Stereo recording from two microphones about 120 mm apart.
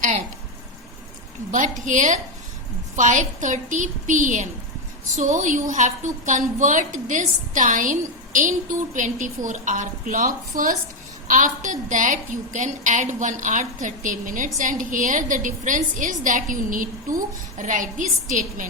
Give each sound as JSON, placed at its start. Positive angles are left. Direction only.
{"t": 1.5, "sound": "a woman's voice", "side_deg": -90}
{"t": 11.3, "sound": "a woman's voice", "side_deg": -90}